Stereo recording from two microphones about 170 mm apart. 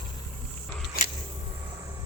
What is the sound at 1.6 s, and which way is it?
Train, 15° right (ahead or behind).